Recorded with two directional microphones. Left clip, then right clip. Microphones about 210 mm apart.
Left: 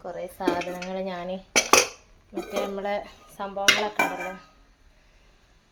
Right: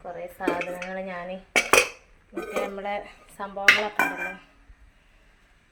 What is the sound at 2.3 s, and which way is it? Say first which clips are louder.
A woman's voice: even; 15° left (ahead or behind).